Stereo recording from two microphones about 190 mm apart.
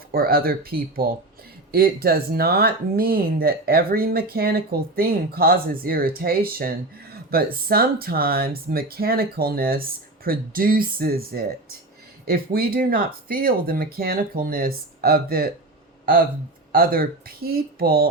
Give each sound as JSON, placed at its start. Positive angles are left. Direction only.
{"t": 0.1, "sound": "speech", "side_deg": -50}
{"t": 16.7, "sound": "speech", "side_deg": -50}